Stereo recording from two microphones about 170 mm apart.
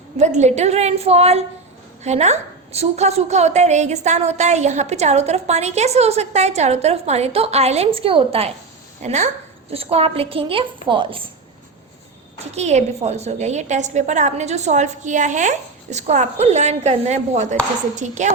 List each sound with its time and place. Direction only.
0.2 s a woman's voice: 45° right (ahead or behind)
12.5 s a woman's voice: 40° right (ahead or behind)